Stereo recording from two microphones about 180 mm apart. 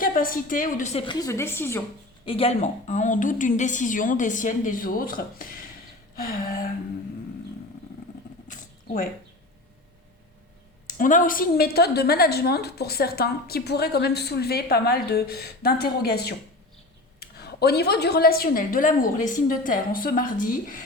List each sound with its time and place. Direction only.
0.0 s a woman's voice: 50° left (ahead or behind)
1.0 s a woman's voice: 20° left (ahead or behind)
2.2 s a woman's voice: 30° left (ahead or behind); by 6.6 s 55° left (ahead or behind)
8.4 s a sound: 50° left (ahead or behind)
10.8 s a woman's voice: 50° left (ahead or behind)